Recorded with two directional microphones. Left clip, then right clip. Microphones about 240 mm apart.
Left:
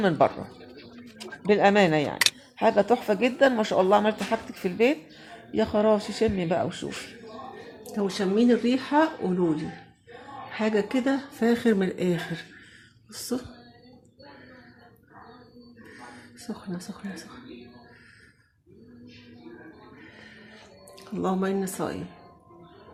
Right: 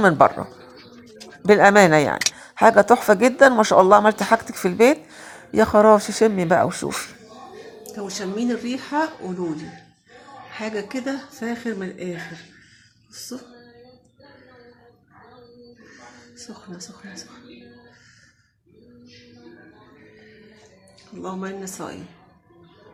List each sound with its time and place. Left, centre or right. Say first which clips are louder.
0.0 s speech: right 7 dB; centre
1.5 s speech: right 8 dB; centre
7.9 s speech: left 3 dB; centre
10.5 s speech: left 3 dB; left
21.2 s speech: left 4 dB; left